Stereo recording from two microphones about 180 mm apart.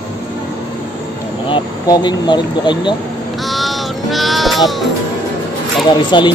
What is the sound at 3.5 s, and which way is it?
Sheep, centre (ahead or behind).